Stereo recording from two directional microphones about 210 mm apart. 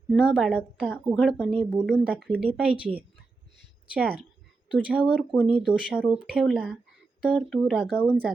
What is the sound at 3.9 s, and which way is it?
Speech, centre (ahead or behind).